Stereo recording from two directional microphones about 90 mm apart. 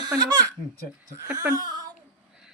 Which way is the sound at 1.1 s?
30° right (ahead or behind).